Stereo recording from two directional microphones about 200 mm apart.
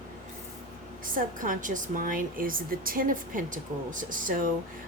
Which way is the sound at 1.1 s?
40° right (ahead or behind).